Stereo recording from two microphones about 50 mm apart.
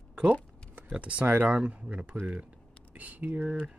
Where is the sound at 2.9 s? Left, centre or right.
Right.